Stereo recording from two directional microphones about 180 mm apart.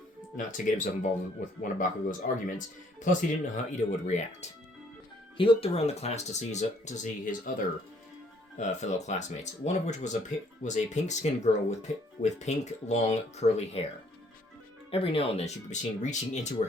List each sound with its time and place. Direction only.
0.3 s speech: 45° left (ahead or behind)
8.5 s speech: 40° left (ahead or behind)
14.8 s speech: 30° left (ahead or behind)